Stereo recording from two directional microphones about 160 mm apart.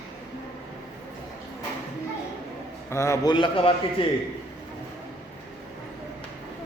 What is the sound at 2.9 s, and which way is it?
A man's voice, 20° left (ahead or behind).